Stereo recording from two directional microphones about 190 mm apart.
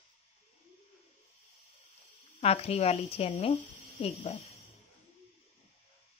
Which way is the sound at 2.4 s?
35° left (ahead or behind).